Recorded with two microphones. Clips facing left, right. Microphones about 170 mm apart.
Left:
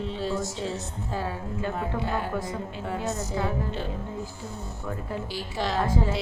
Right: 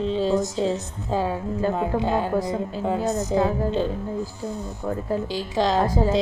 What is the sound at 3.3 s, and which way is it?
Speech, 30° right (ahead or behind).